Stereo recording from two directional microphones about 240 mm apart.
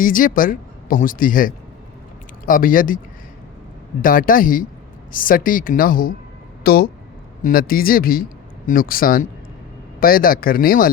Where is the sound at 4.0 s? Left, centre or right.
Left.